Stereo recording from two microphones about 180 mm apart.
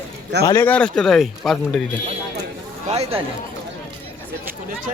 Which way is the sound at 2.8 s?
35° right (ahead or behind).